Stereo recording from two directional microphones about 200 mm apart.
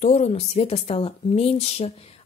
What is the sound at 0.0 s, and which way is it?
Speech, 35° left (ahead or behind).